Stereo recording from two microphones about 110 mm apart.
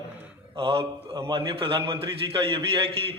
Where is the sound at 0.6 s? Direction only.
55° right (ahead or behind).